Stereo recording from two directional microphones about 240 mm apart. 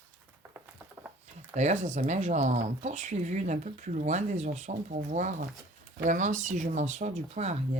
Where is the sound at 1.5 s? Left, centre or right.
Right.